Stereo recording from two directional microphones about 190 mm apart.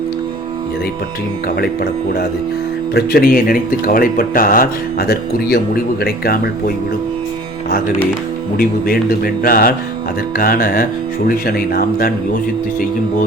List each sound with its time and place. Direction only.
1.5 s speech: 55° left (ahead or behind)
8.5 s speech: 50° left (ahead or behind)